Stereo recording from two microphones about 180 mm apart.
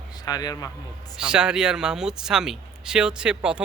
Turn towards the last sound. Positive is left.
turn(degrees=-5)  # may be behind; listen again after turning